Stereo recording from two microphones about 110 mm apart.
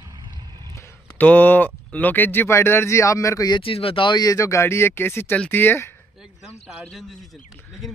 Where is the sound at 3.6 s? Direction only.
55° left (ahead or behind); by 5.9 s 20° left (ahead or behind).